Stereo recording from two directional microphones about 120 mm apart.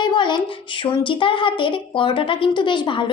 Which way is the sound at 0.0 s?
40° left (ahead or behind).